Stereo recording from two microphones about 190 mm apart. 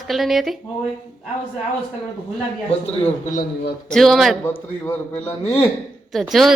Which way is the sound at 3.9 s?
Centre (ahead or behind).